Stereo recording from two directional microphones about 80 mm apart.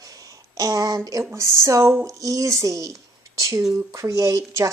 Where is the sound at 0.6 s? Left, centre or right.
Right.